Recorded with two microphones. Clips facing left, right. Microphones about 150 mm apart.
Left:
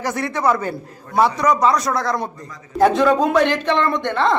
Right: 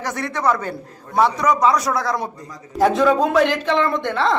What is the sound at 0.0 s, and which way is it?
Speech, 5° left (ahead or behind).